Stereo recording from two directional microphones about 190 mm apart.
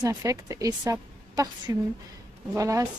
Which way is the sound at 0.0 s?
15° right (ahead or behind).